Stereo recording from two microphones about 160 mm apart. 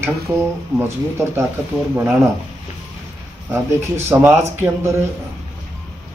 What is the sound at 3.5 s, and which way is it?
Speech, 15° right (ahead or behind).